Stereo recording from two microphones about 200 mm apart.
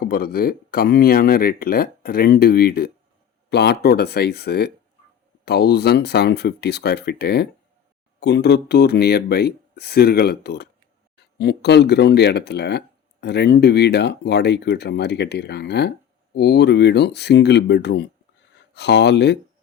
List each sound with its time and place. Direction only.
0.0 s speech: 45° left (ahead or behind)